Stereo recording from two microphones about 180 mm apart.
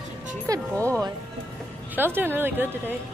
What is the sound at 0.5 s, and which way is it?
Speech, 20° right (ahead or behind).